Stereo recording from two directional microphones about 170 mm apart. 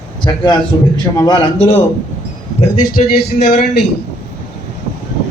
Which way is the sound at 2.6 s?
40° left (ahead or behind).